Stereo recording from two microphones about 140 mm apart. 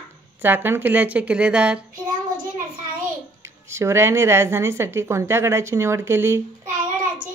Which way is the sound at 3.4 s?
20° right (ahead or behind).